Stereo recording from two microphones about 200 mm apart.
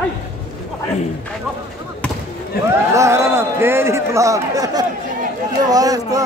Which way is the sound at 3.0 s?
15° right (ahead or behind).